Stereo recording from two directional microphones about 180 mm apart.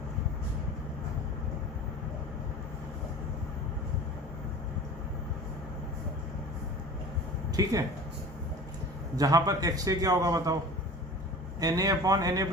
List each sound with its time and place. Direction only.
7.5 s speech: 20° right (ahead or behind)
9.1 s a man's voice: 20° right (ahead or behind)
11.6 s a man's voice: 20° right (ahead or behind)